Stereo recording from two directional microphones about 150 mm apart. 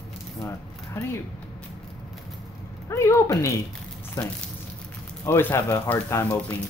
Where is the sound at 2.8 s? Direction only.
20° left (ahead or behind).